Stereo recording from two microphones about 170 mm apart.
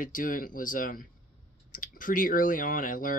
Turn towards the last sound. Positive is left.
turn(degrees=55)  # may be behind; listen again after turning